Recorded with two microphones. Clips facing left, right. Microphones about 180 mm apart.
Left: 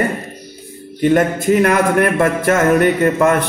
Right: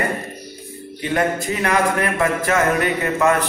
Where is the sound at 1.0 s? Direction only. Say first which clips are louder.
Left 7 dB; 50° left (ahead or behind).